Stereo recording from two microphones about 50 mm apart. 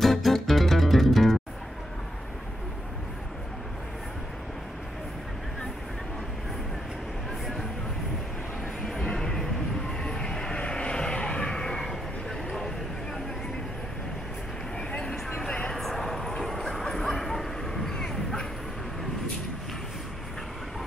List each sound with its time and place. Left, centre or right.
0.0 s music: centre
8.8 s music: centre
9.4 s vehicle: centre
12.4 s a sound: centre
14.8 s a sound: centre
15.7 s bow-wow: centre